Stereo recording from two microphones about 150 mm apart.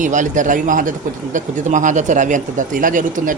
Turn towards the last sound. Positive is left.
turn(degrees=-60)  # may be behind; listen again after turning